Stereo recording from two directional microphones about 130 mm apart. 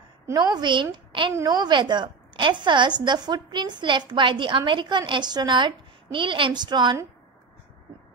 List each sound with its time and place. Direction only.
0.3 s a woman's voice: 30° right (ahead or behind)
0.9 s a sound: 40° right (ahead or behind)
1.3 s a woman's voice: 30° right (ahead or behind)